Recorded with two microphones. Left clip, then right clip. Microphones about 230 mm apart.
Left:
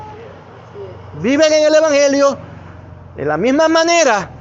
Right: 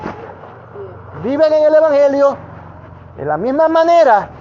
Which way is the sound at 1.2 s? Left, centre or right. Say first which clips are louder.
Even; left.